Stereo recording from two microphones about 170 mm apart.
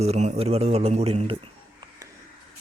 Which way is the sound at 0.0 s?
40° right (ahead or behind).